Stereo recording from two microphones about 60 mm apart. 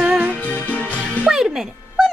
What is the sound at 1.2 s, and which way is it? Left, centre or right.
Music, centre.